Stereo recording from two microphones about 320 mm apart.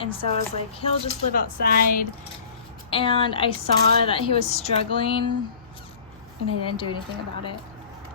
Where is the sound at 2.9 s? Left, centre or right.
Centre.